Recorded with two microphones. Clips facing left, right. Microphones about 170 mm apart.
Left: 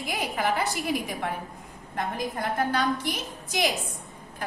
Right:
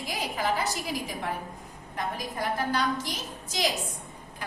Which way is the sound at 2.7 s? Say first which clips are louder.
Left 2 dB; 55° left (ahead or behind).